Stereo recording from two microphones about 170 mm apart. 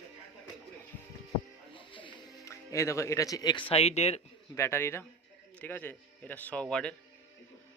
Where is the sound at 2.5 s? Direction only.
15° left (ahead or behind); by 4.2 s 40° left (ahead or behind).